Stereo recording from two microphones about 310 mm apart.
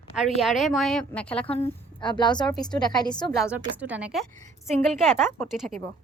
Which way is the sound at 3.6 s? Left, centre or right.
Centre.